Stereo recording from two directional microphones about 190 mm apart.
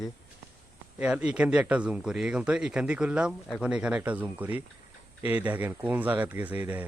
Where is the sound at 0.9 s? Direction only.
5° right (ahead or behind).